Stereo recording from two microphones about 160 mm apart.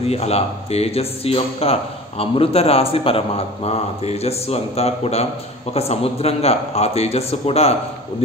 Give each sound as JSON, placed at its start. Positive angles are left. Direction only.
{"t": 0.0, "sound": "a man's voice", "side_deg": 40}